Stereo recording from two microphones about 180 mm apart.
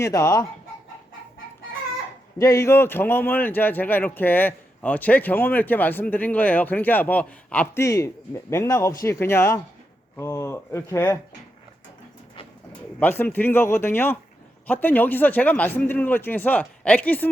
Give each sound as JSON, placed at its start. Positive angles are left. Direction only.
{"t": 0.0, "sound": "speech", "side_deg": 15}
{"t": 2.4, "sound": "speech", "side_deg": 15}
{"t": 13.0, "sound": "speech", "side_deg": 10}